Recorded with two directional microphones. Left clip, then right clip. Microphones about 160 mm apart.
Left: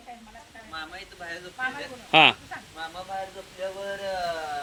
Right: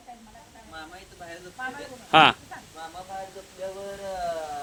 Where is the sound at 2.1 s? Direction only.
10° right (ahead or behind).